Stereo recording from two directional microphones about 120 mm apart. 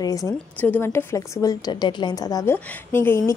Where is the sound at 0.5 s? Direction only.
15° left (ahead or behind).